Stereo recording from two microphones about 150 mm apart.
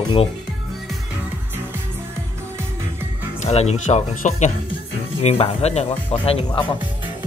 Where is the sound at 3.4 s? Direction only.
45° left (ahead or behind).